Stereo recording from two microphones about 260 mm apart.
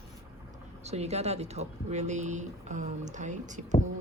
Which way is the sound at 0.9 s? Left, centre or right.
Right.